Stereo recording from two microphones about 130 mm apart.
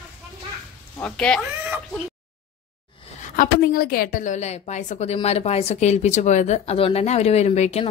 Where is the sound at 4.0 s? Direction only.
90° left.